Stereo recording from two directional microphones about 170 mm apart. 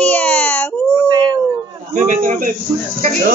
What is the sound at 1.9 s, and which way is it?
Speech, 50° right (ahead or behind).